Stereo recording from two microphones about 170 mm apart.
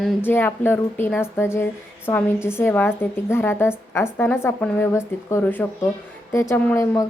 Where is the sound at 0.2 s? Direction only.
10° left (ahead or behind).